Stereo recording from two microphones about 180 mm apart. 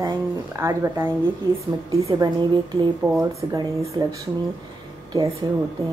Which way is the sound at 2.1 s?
20° right (ahead or behind).